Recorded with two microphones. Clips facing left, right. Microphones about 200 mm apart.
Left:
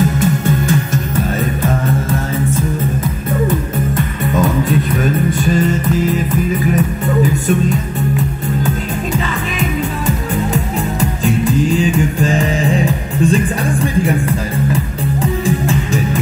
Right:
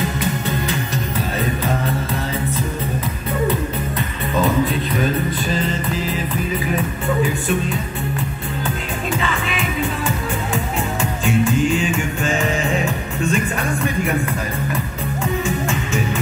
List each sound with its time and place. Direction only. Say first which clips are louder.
9.6 s music: left 5 dB; 40° left (ahead or behind)
15.4 s music: left 6 dB; 35° left (ahead or behind)